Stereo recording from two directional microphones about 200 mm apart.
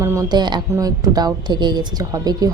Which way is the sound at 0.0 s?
15° right (ahead or behind).